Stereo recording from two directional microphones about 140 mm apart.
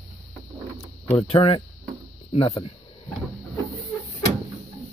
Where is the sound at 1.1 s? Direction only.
45° left (ahead or behind).